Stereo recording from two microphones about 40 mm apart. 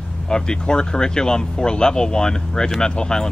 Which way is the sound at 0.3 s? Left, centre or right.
Centre.